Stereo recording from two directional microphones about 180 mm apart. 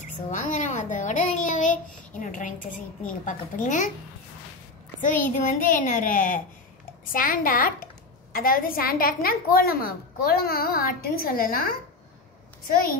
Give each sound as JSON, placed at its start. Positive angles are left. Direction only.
{"t": 0.0, "sound": "a child's voice", "side_deg": 45}
{"t": 5.4, "sound": "a woman's voice", "side_deg": 45}